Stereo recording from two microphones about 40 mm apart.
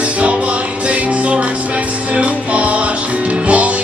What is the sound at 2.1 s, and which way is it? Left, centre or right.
Music, right.